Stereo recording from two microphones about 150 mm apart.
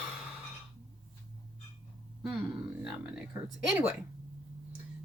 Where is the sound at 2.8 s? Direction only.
5° right (ahead or behind).